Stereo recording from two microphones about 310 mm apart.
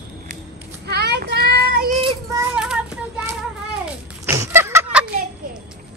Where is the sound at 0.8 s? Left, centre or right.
Right.